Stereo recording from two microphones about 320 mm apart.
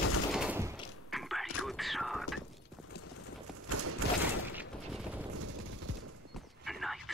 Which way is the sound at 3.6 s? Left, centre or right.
Right.